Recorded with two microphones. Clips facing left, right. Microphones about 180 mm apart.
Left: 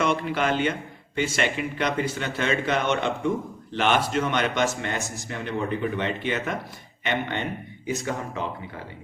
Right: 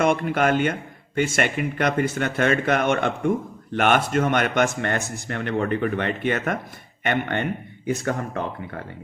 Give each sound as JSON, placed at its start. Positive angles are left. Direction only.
{"t": 0.0, "sound": "speech", "side_deg": -50}